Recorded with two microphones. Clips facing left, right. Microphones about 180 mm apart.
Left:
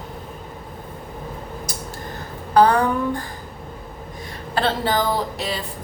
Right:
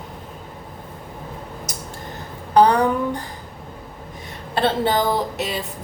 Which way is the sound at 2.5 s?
20° right (ahead or behind).